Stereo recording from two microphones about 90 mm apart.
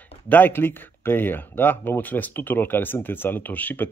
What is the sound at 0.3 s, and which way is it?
Speech, 20° left (ahead or behind).